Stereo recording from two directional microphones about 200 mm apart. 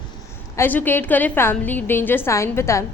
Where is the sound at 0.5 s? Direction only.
10° left (ahead or behind).